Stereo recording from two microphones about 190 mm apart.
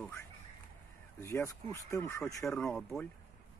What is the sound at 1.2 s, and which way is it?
Speech, 15° left (ahead or behind).